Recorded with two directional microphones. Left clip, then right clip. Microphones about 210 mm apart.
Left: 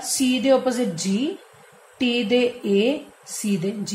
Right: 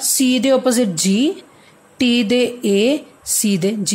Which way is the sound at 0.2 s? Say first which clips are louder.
Right 3 dB; 50° right (ahead or behind).